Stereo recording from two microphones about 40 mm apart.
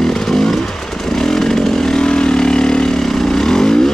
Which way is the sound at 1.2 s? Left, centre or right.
Centre.